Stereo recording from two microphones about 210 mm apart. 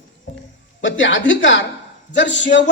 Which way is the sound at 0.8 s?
60° left (ahead or behind).